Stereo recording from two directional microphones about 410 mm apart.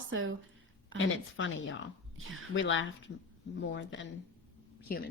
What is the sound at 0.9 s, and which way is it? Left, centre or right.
A woman's voice, left.